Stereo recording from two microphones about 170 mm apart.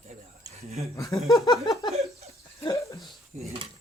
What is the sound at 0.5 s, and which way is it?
Speech, 40° right (ahead or behind).